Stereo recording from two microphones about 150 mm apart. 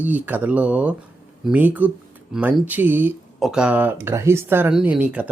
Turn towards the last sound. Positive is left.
turn(degrees=-10)  # may be behind; listen again after turning